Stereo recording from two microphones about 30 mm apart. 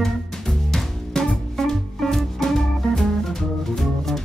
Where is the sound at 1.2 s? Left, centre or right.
Centre.